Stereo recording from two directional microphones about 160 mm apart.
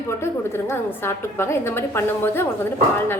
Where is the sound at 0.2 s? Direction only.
15° left (ahead or behind).